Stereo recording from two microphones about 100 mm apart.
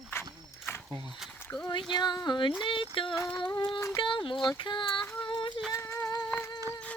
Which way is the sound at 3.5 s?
50° left (ahead or behind).